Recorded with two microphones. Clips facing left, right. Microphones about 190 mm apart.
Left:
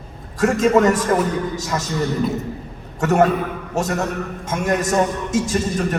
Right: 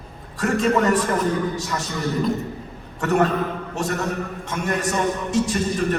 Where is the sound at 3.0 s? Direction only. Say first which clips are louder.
Left 3 dB; 40° left (ahead or behind).